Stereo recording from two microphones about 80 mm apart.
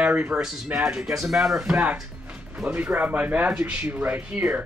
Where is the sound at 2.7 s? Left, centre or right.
Right.